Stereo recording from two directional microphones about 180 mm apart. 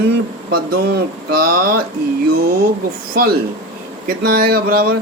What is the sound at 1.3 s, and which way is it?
Speech, 55° right (ahead or behind).